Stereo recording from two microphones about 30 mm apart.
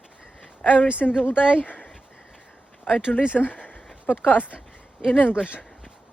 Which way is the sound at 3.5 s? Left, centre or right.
Left.